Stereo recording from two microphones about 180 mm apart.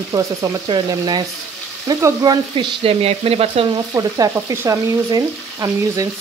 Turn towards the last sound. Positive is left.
turn(degrees=-20)  # may be behind; listen again after turning